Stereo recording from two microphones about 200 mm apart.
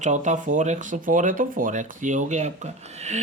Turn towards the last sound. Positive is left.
turn(degrees=-35)  # may be behind; listen again after turning